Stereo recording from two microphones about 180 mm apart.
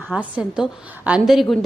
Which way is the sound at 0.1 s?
5° right (ahead or behind).